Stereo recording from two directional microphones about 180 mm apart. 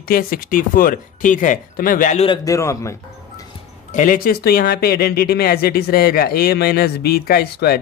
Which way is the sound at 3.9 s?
50° left (ahead or behind).